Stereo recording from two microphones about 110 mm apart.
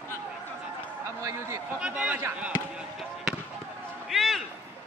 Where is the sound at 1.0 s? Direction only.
25° right (ahead or behind).